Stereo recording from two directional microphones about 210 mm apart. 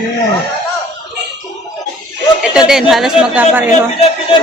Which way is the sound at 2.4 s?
5° right (ahead or behind).